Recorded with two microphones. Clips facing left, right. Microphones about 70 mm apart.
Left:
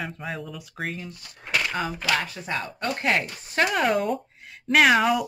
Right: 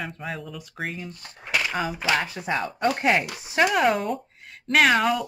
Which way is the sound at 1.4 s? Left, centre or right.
Centre.